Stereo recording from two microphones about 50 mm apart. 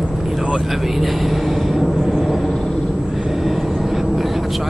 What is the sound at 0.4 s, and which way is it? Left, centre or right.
Vehicle, centre.